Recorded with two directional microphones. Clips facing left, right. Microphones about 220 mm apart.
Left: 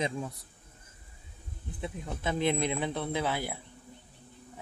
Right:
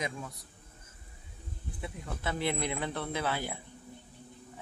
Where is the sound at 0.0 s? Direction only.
30° left (ahead or behind).